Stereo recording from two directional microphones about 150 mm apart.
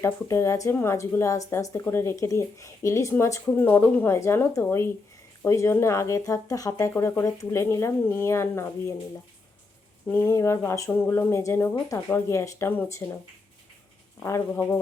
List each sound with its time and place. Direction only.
0.0 s a woman's voice: 20° left (ahead or behind)
10.1 s a woman's voice: 15° left (ahead or behind)
14.2 s a woman's voice: 15° left (ahead or behind)